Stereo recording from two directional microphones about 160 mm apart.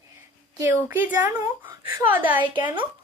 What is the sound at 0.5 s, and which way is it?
Speech, 15° right (ahead or behind).